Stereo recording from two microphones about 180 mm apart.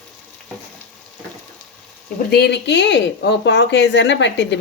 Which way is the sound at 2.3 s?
65° left (ahead or behind).